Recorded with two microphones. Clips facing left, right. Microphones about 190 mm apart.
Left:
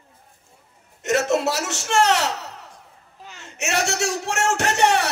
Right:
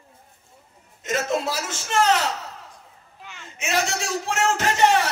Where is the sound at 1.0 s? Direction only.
75° left (ahead or behind).